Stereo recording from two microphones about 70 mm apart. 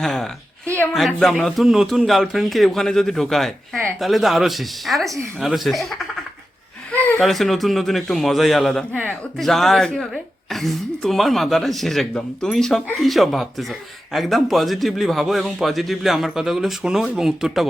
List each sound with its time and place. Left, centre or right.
0.0 s a woman's voice: centre
7.2 s speech: centre
8.9 s speech: left
9.4 s speech: centre